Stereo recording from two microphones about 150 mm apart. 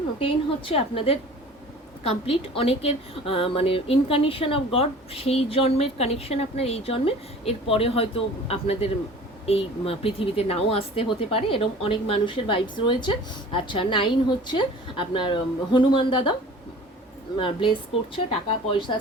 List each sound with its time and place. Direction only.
0.2 s a woman's voice: 40° left (ahead or behind)
17.3 s a woman's voice: 35° left (ahead or behind)